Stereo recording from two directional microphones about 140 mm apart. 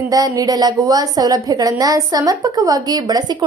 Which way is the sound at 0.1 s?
25° right (ahead or behind).